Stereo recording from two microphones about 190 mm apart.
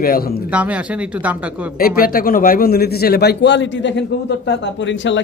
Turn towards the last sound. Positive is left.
turn(degrees=75)  # may be behind; listen again after turning